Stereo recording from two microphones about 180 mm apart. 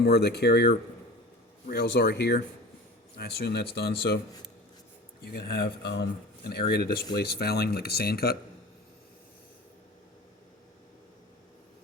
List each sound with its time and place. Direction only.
0.0 s speech: 65° left (ahead or behind)
5.2 s speech: 60° left (ahead or behind)